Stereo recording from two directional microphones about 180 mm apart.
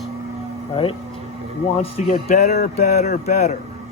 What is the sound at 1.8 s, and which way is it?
Speech, 35° left (ahead or behind).